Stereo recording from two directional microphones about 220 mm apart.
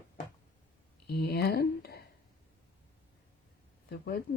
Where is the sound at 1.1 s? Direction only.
45° left (ahead or behind).